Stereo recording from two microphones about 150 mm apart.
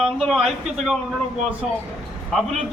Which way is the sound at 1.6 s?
Centre (ahead or behind).